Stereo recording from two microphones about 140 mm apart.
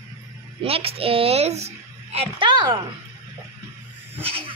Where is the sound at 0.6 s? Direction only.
45° right (ahead or behind).